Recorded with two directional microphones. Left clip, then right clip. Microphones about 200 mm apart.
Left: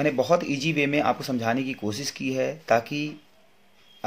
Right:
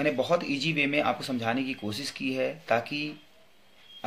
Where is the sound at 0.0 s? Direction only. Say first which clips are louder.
Left 4 dB; 40° left (ahead or behind).